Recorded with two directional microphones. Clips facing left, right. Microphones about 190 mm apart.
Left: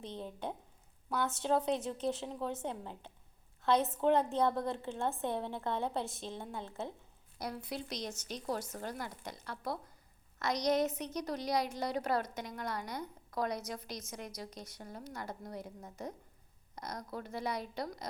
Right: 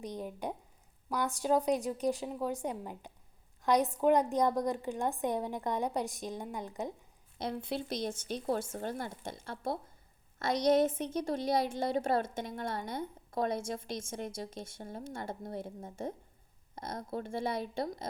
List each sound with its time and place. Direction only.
0.0 s a woman's voice: 15° right (ahead or behind)